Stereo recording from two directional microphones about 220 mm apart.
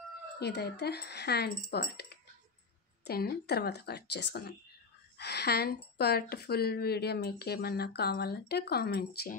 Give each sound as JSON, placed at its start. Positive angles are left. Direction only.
{"t": 0.4, "sound": "speech", "side_deg": 45}